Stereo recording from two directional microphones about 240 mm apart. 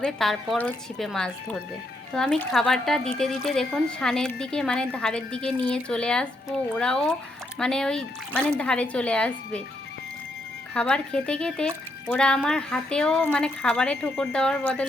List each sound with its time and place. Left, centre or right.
0.0 s speech: centre
10.8 s speech: centre